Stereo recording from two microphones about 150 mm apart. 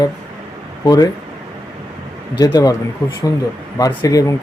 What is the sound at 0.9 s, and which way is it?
Speech, 25° left (ahead or behind).